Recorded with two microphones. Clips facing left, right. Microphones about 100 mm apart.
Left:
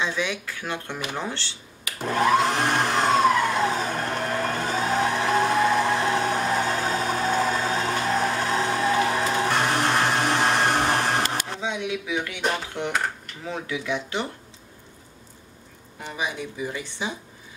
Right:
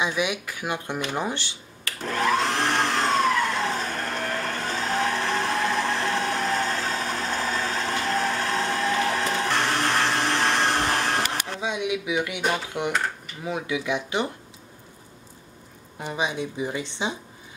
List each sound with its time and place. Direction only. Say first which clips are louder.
0.0 s speech: right 1 dB; 15° right (ahead or behind)
1.9 s vacuum cleaner: left 3 dB; 10° left (ahead or behind)
9.4 s a sound: left 2 dB; 10° left (ahead or behind)
11.6 s speech: right 5 dB; 15° right (ahead or behind)
16.0 s speech: right 3 dB; 20° right (ahead or behind)